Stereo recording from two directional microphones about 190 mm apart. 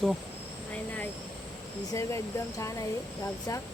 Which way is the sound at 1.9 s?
15° left (ahead or behind).